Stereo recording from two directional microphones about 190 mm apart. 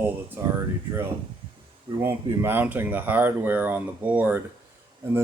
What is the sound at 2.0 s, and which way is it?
Speech, 10° right (ahead or behind).